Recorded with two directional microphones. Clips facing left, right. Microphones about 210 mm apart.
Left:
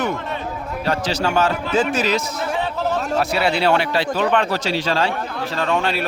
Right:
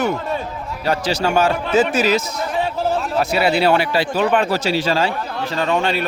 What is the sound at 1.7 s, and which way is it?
Speech, 5° right (ahead or behind).